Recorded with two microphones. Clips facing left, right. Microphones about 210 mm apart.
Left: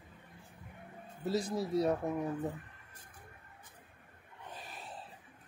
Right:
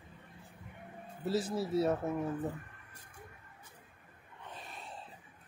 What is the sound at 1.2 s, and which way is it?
Speech, 5° right (ahead or behind).